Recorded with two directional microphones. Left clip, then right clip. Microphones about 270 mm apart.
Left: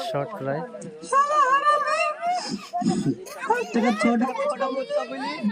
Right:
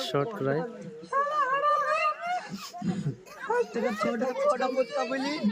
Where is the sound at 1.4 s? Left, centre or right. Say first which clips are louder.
Left 6 dB; left.